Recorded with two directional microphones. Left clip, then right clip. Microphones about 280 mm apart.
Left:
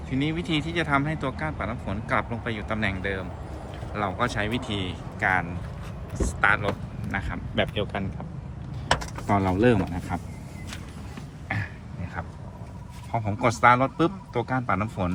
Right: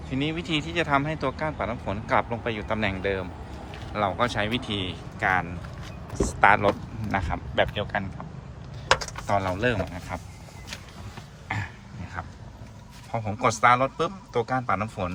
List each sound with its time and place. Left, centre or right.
0.1 s speech: centre
6.1 s speech: centre
9.2 s speech: centre
11.4 s a sound: centre
13.1 s speech: centre